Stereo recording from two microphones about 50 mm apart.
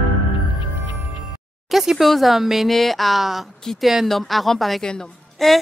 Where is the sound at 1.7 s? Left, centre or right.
Centre.